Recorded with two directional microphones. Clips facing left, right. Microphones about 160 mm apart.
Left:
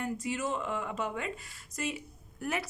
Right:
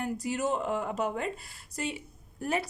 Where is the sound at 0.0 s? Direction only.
40° right (ahead or behind).